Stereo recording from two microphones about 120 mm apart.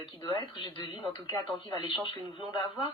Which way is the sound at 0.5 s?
40° left (ahead or behind).